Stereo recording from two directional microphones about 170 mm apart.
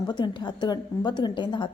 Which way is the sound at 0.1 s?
25° left (ahead or behind).